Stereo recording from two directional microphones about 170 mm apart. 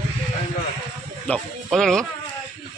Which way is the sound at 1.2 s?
5° left (ahead or behind).